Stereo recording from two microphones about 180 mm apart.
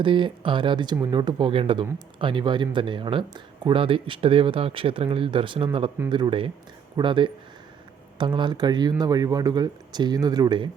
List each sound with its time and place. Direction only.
0.0 s speech: 25° right (ahead or behind)